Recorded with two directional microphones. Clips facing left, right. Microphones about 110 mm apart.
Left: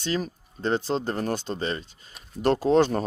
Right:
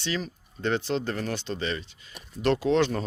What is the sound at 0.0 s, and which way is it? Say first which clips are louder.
Speech: left 3 dB; 45° left (ahead or behind).